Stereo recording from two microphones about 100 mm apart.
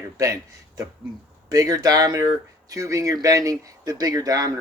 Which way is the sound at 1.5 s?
35° right (ahead or behind).